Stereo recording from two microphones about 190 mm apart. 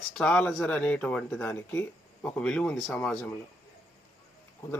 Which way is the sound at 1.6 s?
15° left (ahead or behind).